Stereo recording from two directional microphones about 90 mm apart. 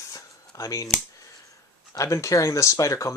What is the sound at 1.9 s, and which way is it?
Speech, 35° left (ahead or behind).